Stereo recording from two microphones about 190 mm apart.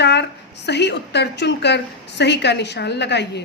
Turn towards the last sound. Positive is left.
turn(degrees=65)  # may be behind; listen again after turning